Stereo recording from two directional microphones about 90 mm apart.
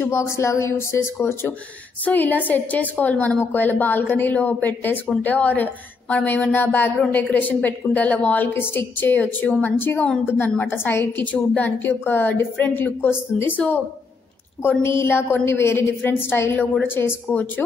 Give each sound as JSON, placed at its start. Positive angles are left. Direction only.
{"t": 0.0, "sound": "a woman's voice", "side_deg": 30}